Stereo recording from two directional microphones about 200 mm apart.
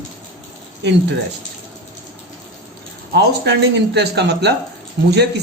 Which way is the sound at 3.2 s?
60° right (ahead or behind).